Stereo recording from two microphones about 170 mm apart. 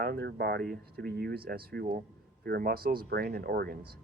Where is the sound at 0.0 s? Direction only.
75° right (ahead or behind).